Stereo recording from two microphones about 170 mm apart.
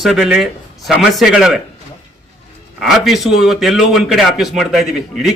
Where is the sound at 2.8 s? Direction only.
Centre (ahead or behind).